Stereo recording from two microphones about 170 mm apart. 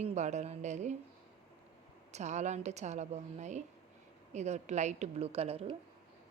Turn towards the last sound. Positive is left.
turn(degrees=-35)  # may be behind; listen again after turning